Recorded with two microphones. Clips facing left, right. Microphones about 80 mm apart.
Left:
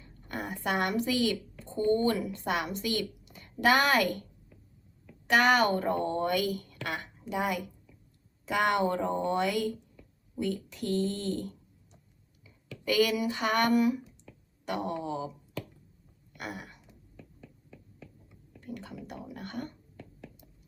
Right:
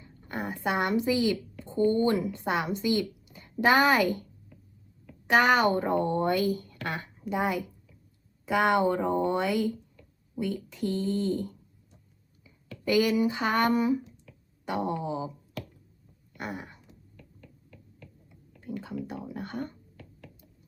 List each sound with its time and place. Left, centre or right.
0.0 s speech: right
5.3 s a woman's voice: right
12.8 s a woman's voice: right
16.4 s speech: right
18.6 s a sound: centre
19.0 s a woman's voice: right